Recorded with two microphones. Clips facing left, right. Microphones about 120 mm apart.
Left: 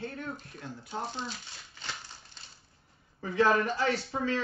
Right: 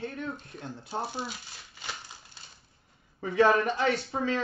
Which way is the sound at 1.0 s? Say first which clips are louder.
Even; 10° right (ahead or behind).